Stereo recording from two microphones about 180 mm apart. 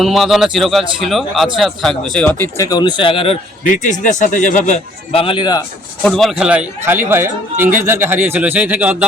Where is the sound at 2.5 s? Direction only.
20° left (ahead or behind).